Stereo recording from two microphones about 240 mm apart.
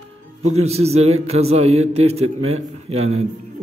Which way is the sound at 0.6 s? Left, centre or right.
Right.